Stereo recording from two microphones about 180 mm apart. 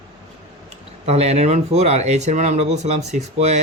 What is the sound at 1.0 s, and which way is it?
Speech, 35° right (ahead or behind).